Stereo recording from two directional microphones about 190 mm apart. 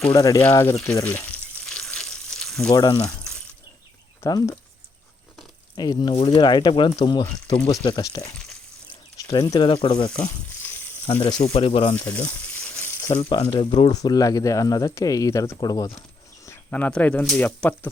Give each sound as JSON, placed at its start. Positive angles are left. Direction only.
{"t": 0.0, "sound": "speech", "side_deg": 15}
{"t": 0.9, "sound": "frying", "side_deg": 15}
{"t": 2.6, "sound": "speech", "side_deg": 20}
{"t": 4.2, "sound": "speech", "side_deg": 15}
{"t": 5.7, "sound": "speech", "side_deg": 20}
{"t": 10.2, "sound": "a sound", "side_deg": 15}
{"t": 11.1, "sound": "speech", "side_deg": 30}
{"t": 11.9, "sound": "speech", "side_deg": 10}
{"t": 12.8, "sound": "frying", "side_deg": 10}
{"t": 13.2, "sound": "speech", "side_deg": 30}
{"t": 16.5, "sound": "speech", "side_deg": 10}